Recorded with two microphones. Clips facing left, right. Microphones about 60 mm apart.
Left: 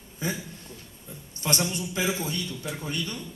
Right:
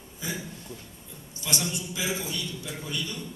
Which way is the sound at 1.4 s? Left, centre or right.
Left.